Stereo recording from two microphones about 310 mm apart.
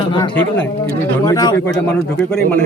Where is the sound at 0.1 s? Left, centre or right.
Centre.